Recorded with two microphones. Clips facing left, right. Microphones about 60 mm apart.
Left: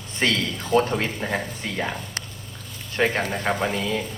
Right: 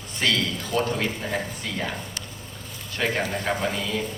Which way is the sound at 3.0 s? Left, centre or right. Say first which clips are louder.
Left 3 dB; left.